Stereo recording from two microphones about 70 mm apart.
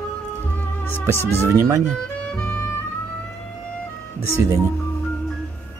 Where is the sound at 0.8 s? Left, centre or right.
Left.